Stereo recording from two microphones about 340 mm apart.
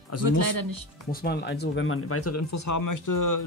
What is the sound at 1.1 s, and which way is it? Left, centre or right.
Speech, left.